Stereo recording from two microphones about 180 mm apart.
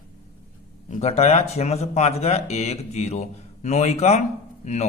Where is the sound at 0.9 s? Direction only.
35° left (ahead or behind).